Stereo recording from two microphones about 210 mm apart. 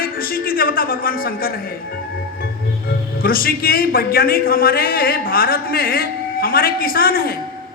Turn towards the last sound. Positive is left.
turn(degrees=45)  # may be behind; listen again after turning